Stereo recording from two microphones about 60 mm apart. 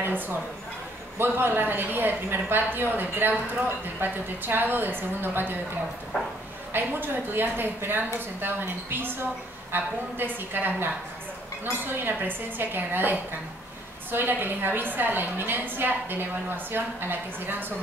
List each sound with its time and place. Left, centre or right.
0.0 s a woman's voice: right
6.7 s a woman's voice: right